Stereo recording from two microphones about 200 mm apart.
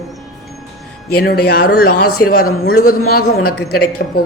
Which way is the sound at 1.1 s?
50° left (ahead or behind).